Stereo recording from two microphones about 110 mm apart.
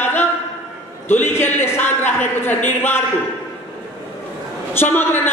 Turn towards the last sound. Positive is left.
turn(degrees=20)  # may be behind; listen again after turning